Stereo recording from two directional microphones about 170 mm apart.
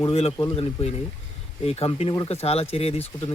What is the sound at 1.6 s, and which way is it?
Speech, 35° left (ahead or behind).